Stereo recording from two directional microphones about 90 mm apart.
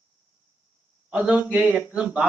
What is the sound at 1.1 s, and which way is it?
Speech, 10° right (ahead or behind).